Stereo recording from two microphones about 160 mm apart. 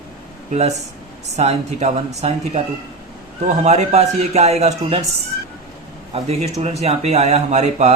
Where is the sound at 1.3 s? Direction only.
45° right (ahead or behind).